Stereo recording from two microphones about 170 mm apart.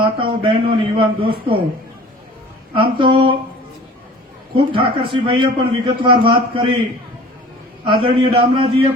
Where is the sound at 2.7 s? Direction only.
30° right (ahead or behind).